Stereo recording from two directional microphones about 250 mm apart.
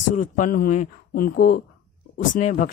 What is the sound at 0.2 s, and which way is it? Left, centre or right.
Speech, left.